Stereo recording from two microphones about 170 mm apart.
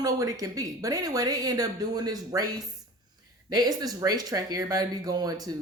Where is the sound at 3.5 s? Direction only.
25° right (ahead or behind).